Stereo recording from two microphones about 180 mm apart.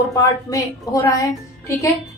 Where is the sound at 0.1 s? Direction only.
20° left (ahead or behind).